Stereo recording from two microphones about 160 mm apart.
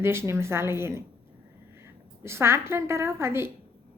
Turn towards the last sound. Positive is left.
turn(degrees=-15)  # may be behind; listen again after turning